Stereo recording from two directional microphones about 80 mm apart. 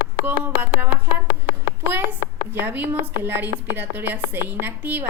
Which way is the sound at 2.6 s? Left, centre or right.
Right.